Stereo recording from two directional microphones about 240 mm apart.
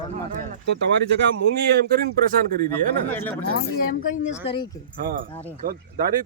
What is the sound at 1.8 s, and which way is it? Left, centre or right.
Speech, right.